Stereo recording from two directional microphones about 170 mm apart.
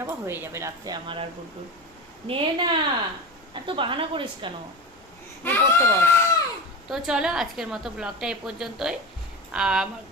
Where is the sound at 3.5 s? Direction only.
30° right (ahead or behind).